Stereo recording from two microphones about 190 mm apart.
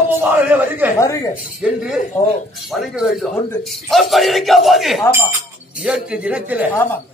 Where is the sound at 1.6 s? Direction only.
5° right (ahead or behind).